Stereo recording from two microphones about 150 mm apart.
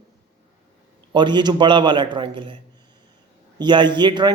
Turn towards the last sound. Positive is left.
turn(degrees=-30)  # may be behind; listen again after turning